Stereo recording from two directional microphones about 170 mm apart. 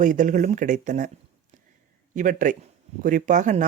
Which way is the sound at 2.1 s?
50° right (ahead or behind).